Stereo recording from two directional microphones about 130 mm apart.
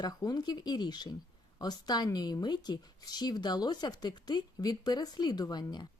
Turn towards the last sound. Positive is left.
turn(degrees=35)  # may be behind; listen again after turning